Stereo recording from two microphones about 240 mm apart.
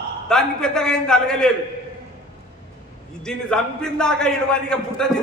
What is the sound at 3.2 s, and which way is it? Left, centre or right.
A man's voice, centre.